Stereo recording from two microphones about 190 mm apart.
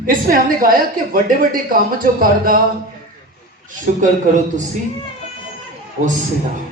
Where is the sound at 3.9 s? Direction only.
40° right (ahead or behind).